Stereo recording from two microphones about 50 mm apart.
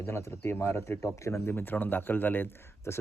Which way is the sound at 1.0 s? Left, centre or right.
Left.